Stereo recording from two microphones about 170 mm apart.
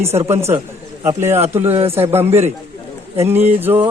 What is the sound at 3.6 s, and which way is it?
Speech, 10° right (ahead or behind).